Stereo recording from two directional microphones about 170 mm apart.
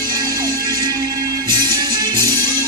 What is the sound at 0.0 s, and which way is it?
Music, 20° right (ahead or behind).